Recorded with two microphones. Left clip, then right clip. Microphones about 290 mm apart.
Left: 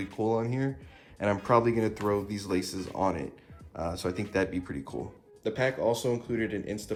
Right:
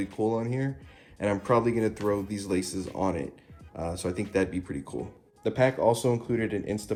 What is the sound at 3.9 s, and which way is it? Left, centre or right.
Speech, centre.